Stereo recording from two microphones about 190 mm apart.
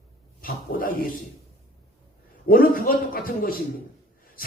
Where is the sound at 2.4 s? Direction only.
50° left (ahead or behind).